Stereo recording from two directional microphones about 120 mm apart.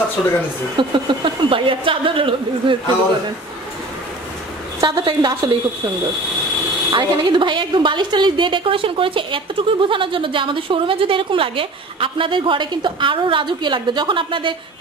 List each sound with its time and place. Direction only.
0.2 s speech: 5° left (ahead or behind)
0.7 s a woman's voice: 45° right (ahead or behind)
4.7 s a woman's voice: 35° right (ahead or behind)
6.9 s a woman's voice: 40° right (ahead or behind)